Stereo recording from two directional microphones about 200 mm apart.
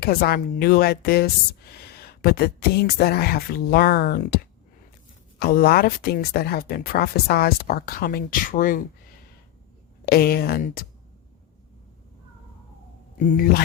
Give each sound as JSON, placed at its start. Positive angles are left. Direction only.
{"t": 0.0, "sound": "speech", "side_deg": 50}
{"t": 5.4, "sound": "speech", "side_deg": 50}
{"t": 10.1, "sound": "speech", "side_deg": 50}
{"t": 13.1, "sound": "speech", "side_deg": 40}